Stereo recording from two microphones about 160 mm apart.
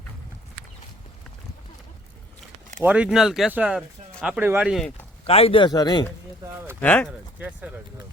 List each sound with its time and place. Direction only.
2.8 s speech: 5° right (ahead or behind)
5.2 s a man's voice: 35° left (ahead or behind)
6.7 s speech: 10° left (ahead or behind)
7.1 s speech: 10° right (ahead or behind)